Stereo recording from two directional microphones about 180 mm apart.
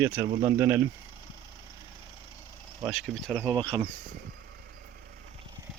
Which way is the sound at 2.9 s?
Centre (ahead or behind).